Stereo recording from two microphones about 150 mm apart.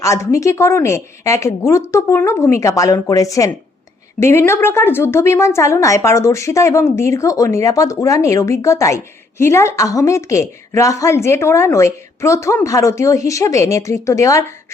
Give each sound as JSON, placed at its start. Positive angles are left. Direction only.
{"t": 0.0, "sound": "a woman's voice", "side_deg": 20}